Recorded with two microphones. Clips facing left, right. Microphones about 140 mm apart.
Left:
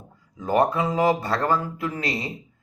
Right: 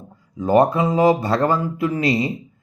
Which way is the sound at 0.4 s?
25° right (ahead or behind).